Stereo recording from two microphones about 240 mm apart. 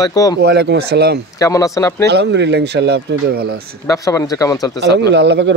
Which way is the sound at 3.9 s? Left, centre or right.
Centre.